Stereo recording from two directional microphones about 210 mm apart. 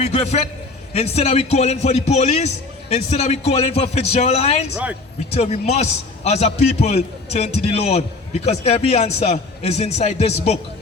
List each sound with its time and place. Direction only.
0.0 s a man's voice: 30° left (ahead or behind)